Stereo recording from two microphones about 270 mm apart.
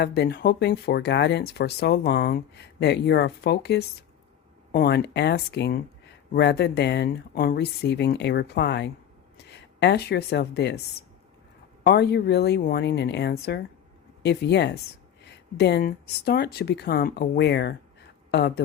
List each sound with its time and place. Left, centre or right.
0.0 s speech: left
11.8 s speech: left